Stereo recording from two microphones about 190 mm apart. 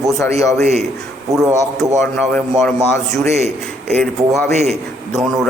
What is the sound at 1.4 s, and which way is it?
A man's voice, centre (ahead or behind).